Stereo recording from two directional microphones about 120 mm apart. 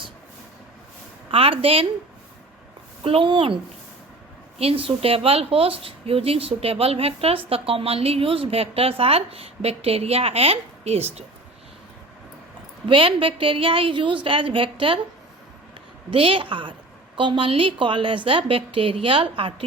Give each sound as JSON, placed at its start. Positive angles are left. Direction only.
{"t": 1.3, "sound": "a woman's voice", "side_deg": -50}
{"t": 3.0, "sound": "a woman's voice", "side_deg": -50}
{"t": 12.9, "sound": "a woman's voice", "side_deg": -45}
{"t": 16.0, "sound": "a woman's voice", "side_deg": -45}